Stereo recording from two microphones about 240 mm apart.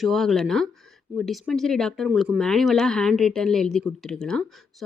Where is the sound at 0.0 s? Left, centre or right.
Centre.